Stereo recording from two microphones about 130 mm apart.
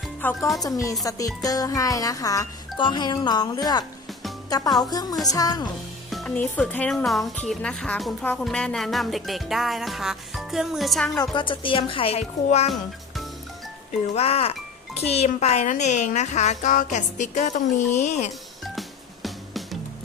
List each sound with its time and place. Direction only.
0.3 s music: centre (ahead or behind)
0.6 s speech: 25° left (ahead or behind)
2.7 s a woman's voice: 35° left (ahead or behind)
6.2 s speech: 10° left (ahead or behind)
8.4 s music: 5° left (ahead or behind)
11.2 s speech: 40° left (ahead or behind)
12.5 s a woman's voice: 55° left (ahead or behind)
14.1 s a woman's voice: 50° left (ahead or behind)
18.6 s music: centre (ahead or behind)